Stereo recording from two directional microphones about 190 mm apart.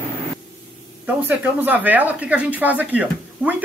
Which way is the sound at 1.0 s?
10° right (ahead or behind).